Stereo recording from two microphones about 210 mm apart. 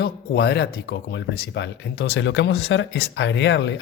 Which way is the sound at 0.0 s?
50° left (ahead or behind).